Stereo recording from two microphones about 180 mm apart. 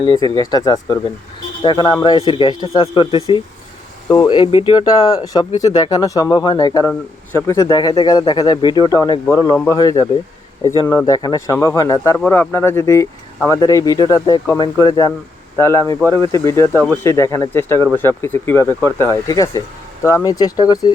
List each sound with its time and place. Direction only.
0.2 s speech: 20° left (ahead or behind)